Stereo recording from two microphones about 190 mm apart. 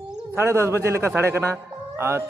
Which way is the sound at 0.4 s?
15° right (ahead or behind).